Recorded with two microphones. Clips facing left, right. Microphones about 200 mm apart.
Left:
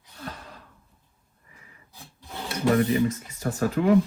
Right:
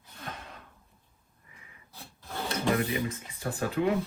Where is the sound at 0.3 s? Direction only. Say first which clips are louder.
Left 2 dB; 35° left (ahead or behind).